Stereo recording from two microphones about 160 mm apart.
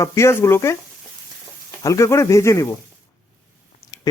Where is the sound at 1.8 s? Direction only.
20° left (ahead or behind).